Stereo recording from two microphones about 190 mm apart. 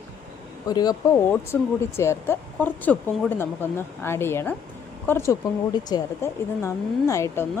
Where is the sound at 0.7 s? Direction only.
20° left (ahead or behind).